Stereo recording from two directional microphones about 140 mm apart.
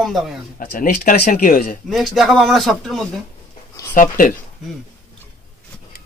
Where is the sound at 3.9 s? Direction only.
80° left.